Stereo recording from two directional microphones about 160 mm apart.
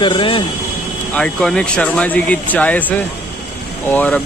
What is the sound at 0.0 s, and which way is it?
Speech, 35° left (ahead or behind).